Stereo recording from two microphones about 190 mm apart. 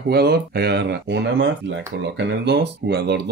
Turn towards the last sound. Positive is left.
turn(degrees=-60)  # may be behind; listen again after turning